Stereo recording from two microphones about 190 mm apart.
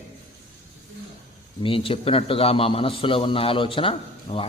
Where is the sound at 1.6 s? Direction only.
30° left (ahead or behind).